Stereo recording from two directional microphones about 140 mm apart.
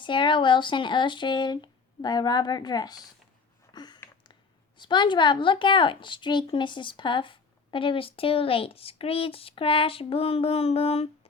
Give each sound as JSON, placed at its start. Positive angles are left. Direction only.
{"t": 0.0, "sound": "a woman's voice", "side_deg": 35}
{"t": 3.7, "sound": "a sound", "side_deg": 30}
{"t": 4.8, "sound": "a woman's voice", "side_deg": 35}